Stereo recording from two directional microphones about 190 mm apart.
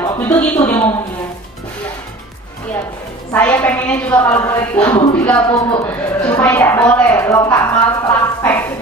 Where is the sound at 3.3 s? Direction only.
10° left (ahead or behind).